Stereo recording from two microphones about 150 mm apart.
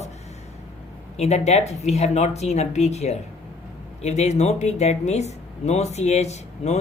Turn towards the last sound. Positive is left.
turn(degrees=45)  # may be behind; listen again after turning